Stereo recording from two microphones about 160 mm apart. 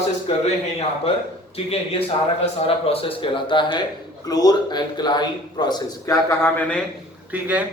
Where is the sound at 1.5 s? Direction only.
40° left (ahead or behind).